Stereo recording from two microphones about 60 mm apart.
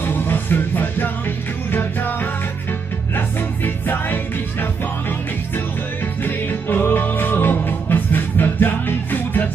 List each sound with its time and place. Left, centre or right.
0.0 s music: left
3.2 s music: left
6.2 s music: left